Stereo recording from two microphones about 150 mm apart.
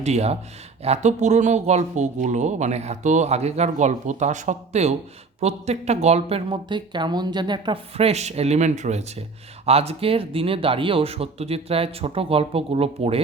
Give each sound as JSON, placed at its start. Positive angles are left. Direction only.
{"t": 0.0, "sound": "speech", "side_deg": -45}